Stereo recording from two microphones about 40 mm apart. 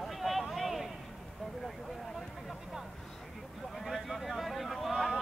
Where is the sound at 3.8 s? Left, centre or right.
Centre.